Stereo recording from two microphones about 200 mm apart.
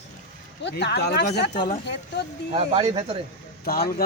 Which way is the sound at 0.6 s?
55° left (ahead or behind).